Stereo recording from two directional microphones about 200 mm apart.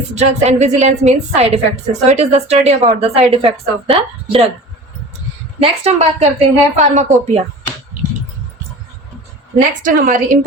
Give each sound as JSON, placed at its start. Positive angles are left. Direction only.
{"t": 0.1, "sound": "a woman's voice", "side_deg": -35}
{"t": 5.6, "sound": "a woman's voice", "side_deg": -30}
{"t": 9.6, "sound": "a woman's voice", "side_deg": -40}